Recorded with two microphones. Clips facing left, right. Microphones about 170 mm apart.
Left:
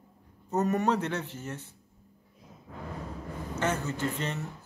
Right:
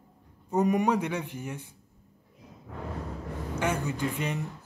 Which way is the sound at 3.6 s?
10° right (ahead or behind).